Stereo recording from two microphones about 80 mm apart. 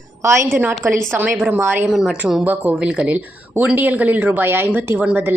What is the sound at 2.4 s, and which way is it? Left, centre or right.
A woman's voice, centre.